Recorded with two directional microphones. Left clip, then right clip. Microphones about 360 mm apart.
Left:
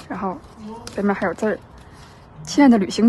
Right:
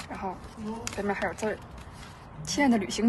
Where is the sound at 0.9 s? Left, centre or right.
Left.